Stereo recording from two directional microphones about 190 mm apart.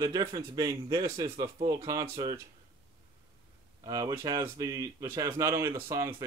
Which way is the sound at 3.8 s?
20° right (ahead or behind).